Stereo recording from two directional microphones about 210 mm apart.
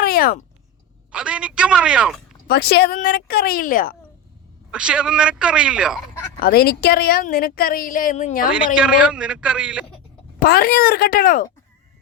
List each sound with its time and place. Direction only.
0.0 s a sound: 45° left (ahead or behind)
1.1 s a man's voice: 5° right (ahead or behind)
2.5 s a woman's voice: 50° left (ahead or behind)
4.7 s a man's voice: 5° right (ahead or behind)
6.4 s a woman's voice: 45° left (ahead or behind)
8.5 s a man's voice: 5° right (ahead or behind)
10.4 s a woman's voice: 45° left (ahead or behind)